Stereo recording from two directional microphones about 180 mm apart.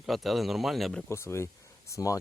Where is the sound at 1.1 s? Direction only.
15° left (ahead or behind).